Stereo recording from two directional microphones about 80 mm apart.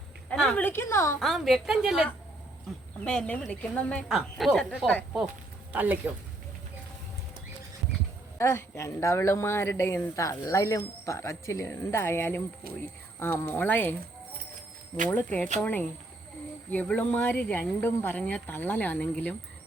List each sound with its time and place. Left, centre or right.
0.5 s speech: left
1.2 s a woman's voice: centre
3.0 s speech: centre
4.1 s speech: centre
5.7 s speech: right
8.4 s speech: left
15.1 s speech: left
18.2 s speech: centre
18.4 s speech: left